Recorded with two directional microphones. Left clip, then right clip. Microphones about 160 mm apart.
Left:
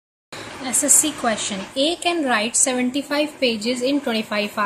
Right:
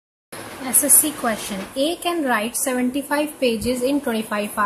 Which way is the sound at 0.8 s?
5° left (ahead or behind).